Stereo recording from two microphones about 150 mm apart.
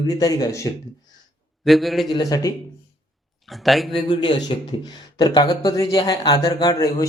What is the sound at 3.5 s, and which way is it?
Speech, centre (ahead or behind).